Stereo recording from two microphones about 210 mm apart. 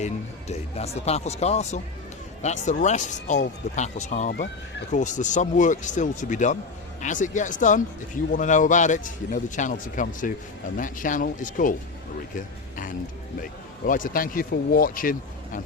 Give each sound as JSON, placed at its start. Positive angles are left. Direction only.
{"t": 0.0, "sound": "speech", "side_deg": 30}
{"t": 13.4, "sound": "speech", "side_deg": 40}